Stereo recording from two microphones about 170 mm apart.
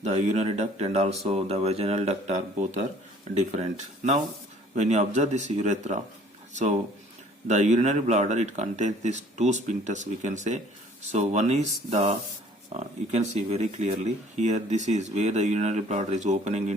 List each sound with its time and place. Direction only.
0.0 s speech: 45° right (ahead or behind)